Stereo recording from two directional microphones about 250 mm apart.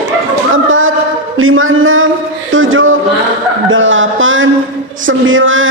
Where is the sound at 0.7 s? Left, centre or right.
Right.